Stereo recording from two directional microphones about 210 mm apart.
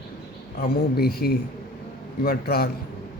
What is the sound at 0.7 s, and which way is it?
A man's voice, 50° left (ahead or behind).